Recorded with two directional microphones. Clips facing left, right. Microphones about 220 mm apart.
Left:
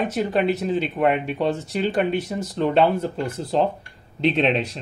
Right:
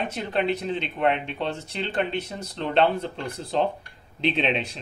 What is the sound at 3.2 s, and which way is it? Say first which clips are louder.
Speech: left 4 dB; 40° left (ahead or behind).